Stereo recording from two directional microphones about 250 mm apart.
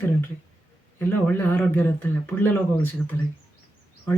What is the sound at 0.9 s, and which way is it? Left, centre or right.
Speech, centre.